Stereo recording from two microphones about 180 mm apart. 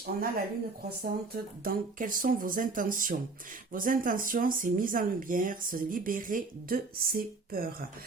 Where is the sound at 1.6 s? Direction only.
50° right (ahead or behind).